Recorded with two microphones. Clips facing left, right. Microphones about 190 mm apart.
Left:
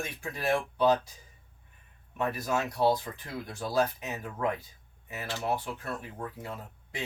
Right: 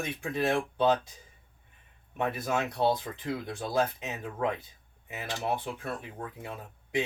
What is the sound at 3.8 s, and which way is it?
Speech, 20° right (ahead or behind).